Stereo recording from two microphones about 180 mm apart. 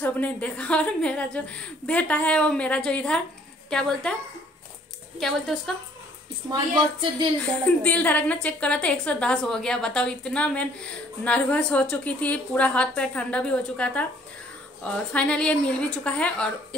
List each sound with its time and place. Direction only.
0.0 s a woman's voice: 10° left (ahead or behind)
5.2 s a woman's voice: centre (ahead or behind)
6.5 s a woman's voice: 25° right (ahead or behind)
7.3 s a woman's voice: 10° left (ahead or behind)
15.1 s a woman's voice: 5° left (ahead or behind)